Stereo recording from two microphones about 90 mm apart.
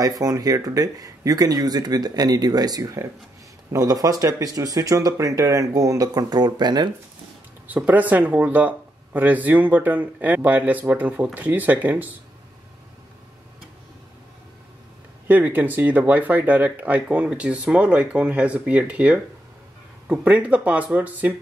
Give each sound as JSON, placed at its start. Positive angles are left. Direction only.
{"t": 0.0, "sound": "speech", "side_deg": -45}
{"t": 7.6, "sound": "speech", "side_deg": -20}
{"t": 15.2, "sound": "speech", "side_deg": -20}